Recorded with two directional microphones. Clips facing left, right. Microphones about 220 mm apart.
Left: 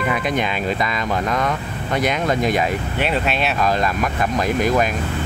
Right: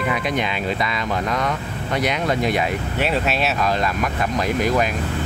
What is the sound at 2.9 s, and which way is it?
Speech, centre (ahead or behind).